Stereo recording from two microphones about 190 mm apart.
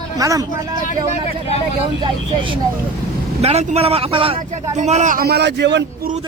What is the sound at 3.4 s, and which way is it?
A man's voice, 35° right (ahead or behind).